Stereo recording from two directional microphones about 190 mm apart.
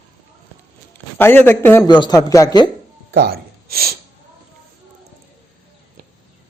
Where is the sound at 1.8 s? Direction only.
25° left (ahead or behind).